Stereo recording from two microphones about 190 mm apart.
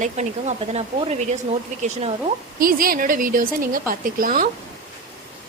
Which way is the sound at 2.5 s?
50° right (ahead or behind).